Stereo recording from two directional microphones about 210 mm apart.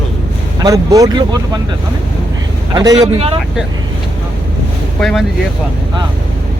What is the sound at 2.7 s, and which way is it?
Speech, 20° right (ahead or behind).